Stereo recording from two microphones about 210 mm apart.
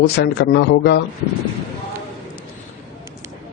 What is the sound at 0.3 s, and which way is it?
Speech, 50° left (ahead or behind).